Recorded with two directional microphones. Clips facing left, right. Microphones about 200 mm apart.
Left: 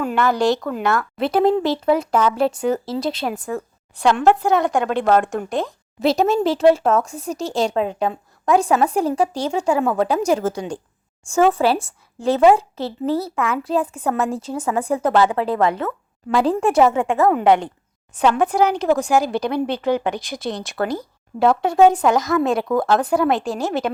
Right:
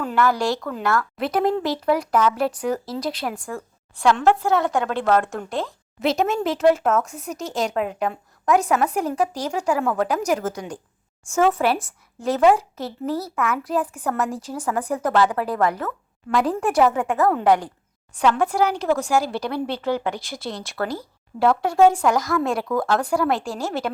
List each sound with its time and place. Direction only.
0.0 s speech: 20° left (ahead or behind)
6.0 s speech: 35° left (ahead or behind)